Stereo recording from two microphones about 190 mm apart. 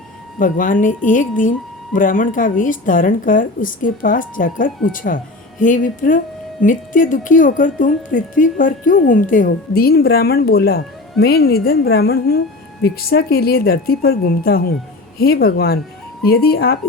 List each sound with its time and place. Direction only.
0.3 s a woman's voice: 45° left (ahead or behind)